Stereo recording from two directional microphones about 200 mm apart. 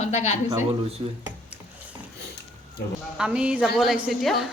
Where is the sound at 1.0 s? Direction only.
30° right (ahead or behind).